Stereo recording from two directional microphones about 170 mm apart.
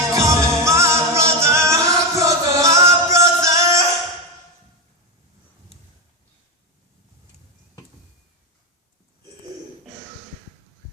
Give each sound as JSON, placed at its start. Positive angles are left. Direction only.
{"t": 0.1, "sound": "music", "side_deg": -20}